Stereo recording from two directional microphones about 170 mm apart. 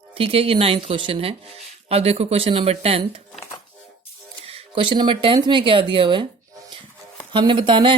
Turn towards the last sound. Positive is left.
turn(degrees=-30)  # may be behind; listen again after turning